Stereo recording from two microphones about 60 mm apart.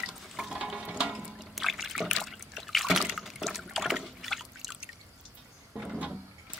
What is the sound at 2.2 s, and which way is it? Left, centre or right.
Trickle, centre.